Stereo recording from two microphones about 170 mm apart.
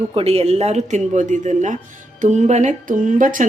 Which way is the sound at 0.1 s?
35° right (ahead or behind).